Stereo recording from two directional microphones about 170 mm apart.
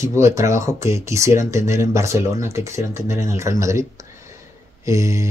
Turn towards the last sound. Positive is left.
turn(degrees=-20)  # may be behind; listen again after turning